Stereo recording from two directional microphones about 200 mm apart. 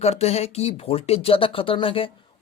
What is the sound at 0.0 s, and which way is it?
Speech, 30° left (ahead or behind).